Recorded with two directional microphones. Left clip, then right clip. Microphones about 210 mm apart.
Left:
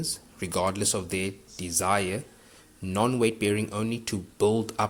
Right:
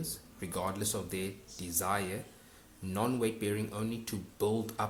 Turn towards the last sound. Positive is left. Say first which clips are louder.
# left 8 dB
turn(degrees=30)  # may be behind; listen again after turning